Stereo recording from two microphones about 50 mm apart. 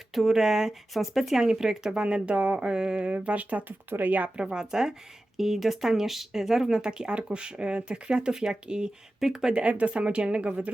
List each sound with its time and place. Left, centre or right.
0.1 s speech: centre; by 4.3 s right
4.4 s speech: centre
9.5 s speech: right